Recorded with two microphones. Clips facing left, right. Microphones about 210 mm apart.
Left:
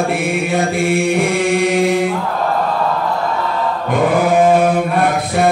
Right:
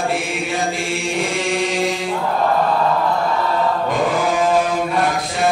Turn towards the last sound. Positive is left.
turn(degrees=55)  # may be behind; listen again after turning